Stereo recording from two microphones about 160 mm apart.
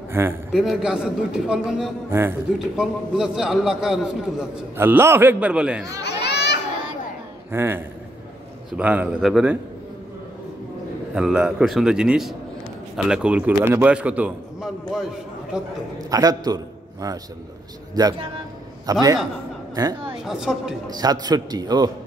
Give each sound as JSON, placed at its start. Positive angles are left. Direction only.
{"t": 0.1, "sound": "a man's voice", "side_deg": -15}
{"t": 0.5, "sound": "a man's voice", "side_deg": 0}
{"t": 2.0, "sound": "a man's voice", "side_deg": -15}
{"t": 2.8, "sound": "a man's voice", "side_deg": -5}
{"t": 4.7, "sound": "a man's voice", "side_deg": -15}
{"t": 5.9, "sound": "a sound", "side_deg": 90}
{"t": 7.5, "sound": "a man's voice", "side_deg": -15}
{"t": 11.1, "sound": "a man's voice", "side_deg": -5}
{"t": 16.0, "sound": "a man's voice", "side_deg": -20}
{"t": 20.2, "sound": "a man's voice", "side_deg": -5}
{"t": 20.8, "sound": "a man's voice", "side_deg": -25}